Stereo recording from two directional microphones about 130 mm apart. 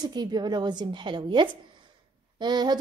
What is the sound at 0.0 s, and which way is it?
A woman's voice, 35° right (ahead or behind).